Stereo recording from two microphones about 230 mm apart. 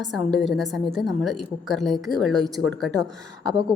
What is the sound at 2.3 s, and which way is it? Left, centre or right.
Speech, centre.